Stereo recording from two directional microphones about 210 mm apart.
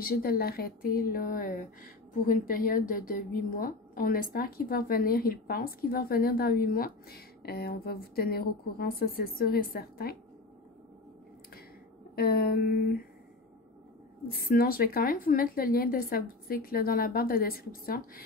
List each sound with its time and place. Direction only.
0.0 s speech: 45° left (ahead or behind)
12.2 s speech: 45° left (ahead or behind)
14.4 s speech: 45° left (ahead or behind)